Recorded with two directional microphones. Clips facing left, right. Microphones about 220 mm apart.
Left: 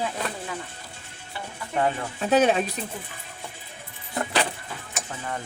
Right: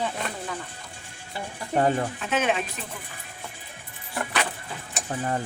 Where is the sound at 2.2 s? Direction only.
35° left (ahead or behind).